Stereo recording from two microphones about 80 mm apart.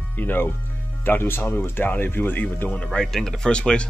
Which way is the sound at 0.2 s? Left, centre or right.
Left.